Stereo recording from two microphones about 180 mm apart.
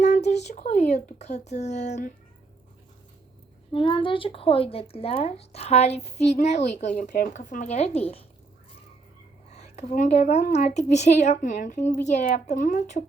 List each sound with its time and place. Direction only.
0.0 s speech: 40° left (ahead or behind)
3.7 s a woman's voice: 30° left (ahead or behind)
9.5 s a woman's voice: 35° left (ahead or behind)